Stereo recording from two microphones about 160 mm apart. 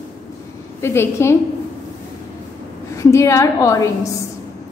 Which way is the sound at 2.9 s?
20° left (ahead or behind).